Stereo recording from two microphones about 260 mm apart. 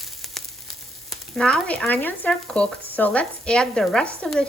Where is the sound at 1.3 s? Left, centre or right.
Centre.